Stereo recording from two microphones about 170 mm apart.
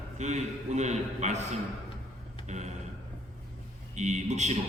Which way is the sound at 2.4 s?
45° right (ahead or behind).